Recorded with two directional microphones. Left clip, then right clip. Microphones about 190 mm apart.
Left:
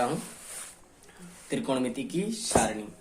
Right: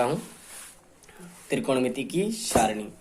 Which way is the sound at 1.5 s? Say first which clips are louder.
Right 4 dB; 35° right (ahead or behind).